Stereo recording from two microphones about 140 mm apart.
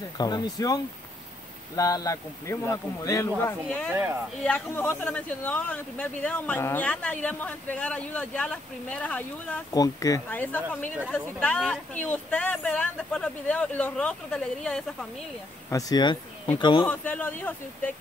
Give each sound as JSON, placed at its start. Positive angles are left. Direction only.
{"t": 0.2, "sound": "speech", "side_deg": 30}
{"t": 1.8, "sound": "speech", "side_deg": 25}
{"t": 3.6, "sound": "speech", "side_deg": 10}
{"t": 3.9, "sound": "speech", "side_deg": -15}
{"t": 4.5, "sound": "speech", "side_deg": 15}
{"t": 9.7, "sound": "speech", "side_deg": 25}
{"t": 10.3, "sound": "speech", "side_deg": 10}
{"t": 15.7, "sound": "speech", "side_deg": 30}
{"t": 16.8, "sound": "speech", "side_deg": 10}